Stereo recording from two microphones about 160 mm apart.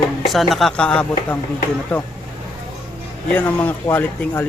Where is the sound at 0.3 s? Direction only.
Centre (ahead or behind).